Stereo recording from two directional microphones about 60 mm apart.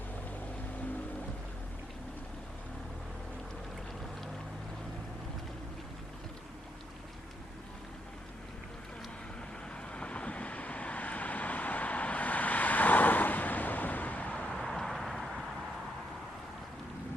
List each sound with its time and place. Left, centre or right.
9.9 s vehicle: centre
14.5 s vehicle: centre